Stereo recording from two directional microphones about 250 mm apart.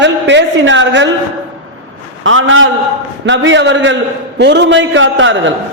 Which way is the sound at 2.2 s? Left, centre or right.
Right.